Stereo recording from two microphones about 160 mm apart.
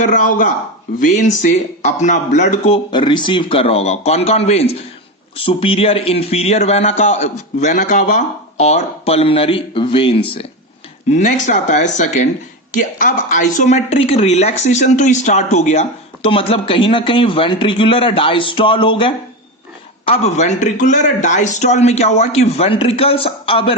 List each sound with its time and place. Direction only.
0.0 s a man's voice: 55° left (ahead or behind); by 10.4 s 35° left (ahead or behind)
11.1 s a man's voice: 50° left (ahead or behind); by 19.1 s 30° left (ahead or behind)
20.1 s a man's voice: 45° left (ahead or behind)